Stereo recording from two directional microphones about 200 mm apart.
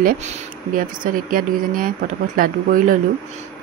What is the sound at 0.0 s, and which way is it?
Speech, 40° right (ahead or behind).